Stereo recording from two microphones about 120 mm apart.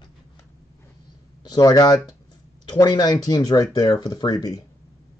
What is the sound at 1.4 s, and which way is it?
Speech, 35° left (ahead or behind).